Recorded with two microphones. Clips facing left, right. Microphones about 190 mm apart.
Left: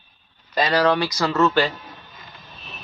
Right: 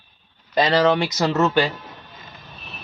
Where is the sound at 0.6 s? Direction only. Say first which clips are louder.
Right 2 dB; 25° right (ahead or behind).